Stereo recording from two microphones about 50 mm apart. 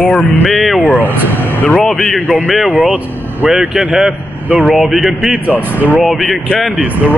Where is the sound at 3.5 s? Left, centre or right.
Centre.